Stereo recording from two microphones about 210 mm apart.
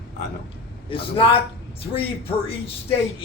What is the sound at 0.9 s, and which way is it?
Speech, 25° left (ahead or behind).